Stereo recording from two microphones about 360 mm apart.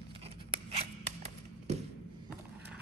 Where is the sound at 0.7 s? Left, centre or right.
Centre.